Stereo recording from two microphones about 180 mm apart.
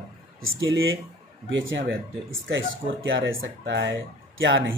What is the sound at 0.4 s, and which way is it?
Speech, 90° right.